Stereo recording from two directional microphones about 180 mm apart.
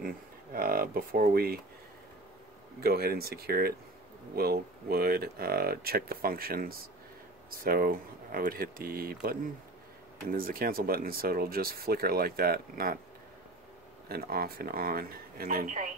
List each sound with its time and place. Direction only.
0.0 s speech: 55° right (ahead or behind)
2.8 s speech: 60° right (ahead or behind)
14.0 s speech: 60° right (ahead or behind)